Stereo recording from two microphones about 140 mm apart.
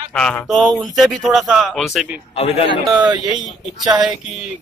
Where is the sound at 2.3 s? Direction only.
45° left (ahead or behind).